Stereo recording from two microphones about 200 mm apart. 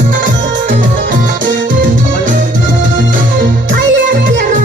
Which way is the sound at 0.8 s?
40° right (ahead or behind).